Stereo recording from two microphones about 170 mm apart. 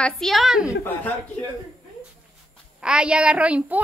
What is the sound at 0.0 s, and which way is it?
Speech, centre (ahead or behind).